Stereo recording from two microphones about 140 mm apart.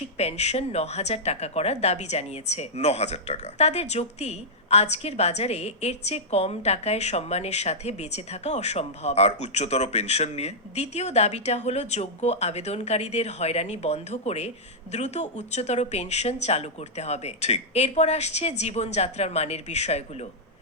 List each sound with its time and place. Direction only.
0.2 s speech: 50° left (ahead or behind)